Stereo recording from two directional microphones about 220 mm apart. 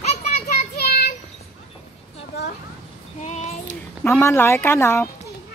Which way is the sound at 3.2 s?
30° left (ahead or behind).